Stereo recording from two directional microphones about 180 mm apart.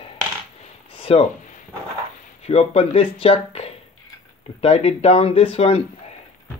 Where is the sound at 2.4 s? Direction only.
35° left (ahead or behind).